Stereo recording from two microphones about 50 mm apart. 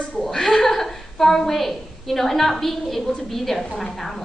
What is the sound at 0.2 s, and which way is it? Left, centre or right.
A woman's voice, centre.